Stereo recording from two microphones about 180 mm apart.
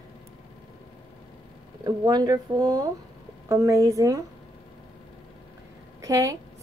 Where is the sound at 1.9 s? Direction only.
20° right (ahead or behind).